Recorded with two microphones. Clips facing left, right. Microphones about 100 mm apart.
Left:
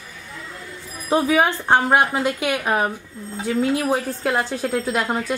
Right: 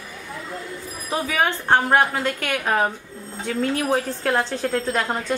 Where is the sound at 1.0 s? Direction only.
25° left (ahead or behind); by 5.3 s 5° left (ahead or behind).